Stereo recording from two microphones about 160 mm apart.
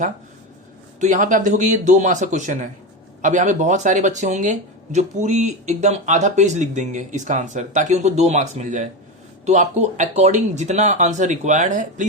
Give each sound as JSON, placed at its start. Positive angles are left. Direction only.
{"t": 0.9, "sound": "speech", "side_deg": -50}